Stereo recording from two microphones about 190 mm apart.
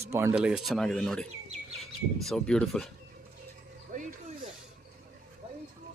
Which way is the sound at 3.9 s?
45° right (ahead or behind).